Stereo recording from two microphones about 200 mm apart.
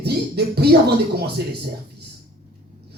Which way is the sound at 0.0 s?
55° right (ahead or behind).